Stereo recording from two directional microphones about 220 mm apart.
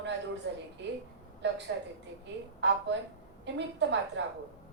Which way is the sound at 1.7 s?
55° right (ahead or behind).